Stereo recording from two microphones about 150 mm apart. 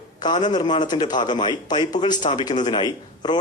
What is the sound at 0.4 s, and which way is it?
A man's voice, 30° left (ahead or behind).